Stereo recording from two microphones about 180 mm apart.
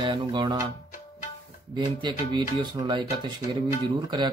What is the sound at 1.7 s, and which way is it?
Speech, 25° right (ahead or behind).